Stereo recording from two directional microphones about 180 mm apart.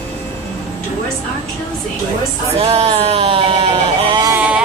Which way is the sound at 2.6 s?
35° right (ahead or behind).